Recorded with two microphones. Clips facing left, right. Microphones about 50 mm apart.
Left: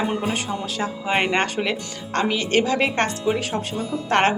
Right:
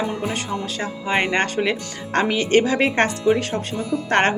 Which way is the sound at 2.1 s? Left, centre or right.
Right.